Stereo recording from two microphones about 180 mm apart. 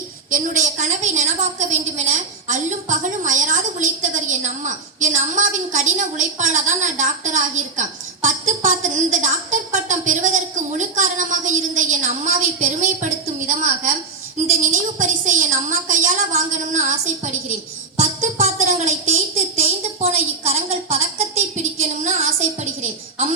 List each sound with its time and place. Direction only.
0.3 s a woman's voice: 45° right (ahead or behind)
17.9 s music: 40° right (ahead or behind)
19.5 s a woman's voice: 35° right (ahead or behind)